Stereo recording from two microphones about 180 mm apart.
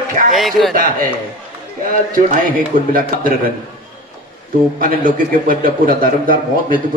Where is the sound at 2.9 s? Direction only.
55° right (ahead or behind).